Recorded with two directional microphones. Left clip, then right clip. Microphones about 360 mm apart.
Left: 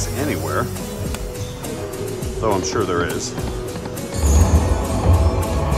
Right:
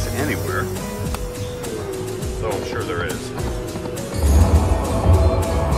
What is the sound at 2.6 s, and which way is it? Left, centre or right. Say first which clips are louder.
Speech: left 4 dB; centre.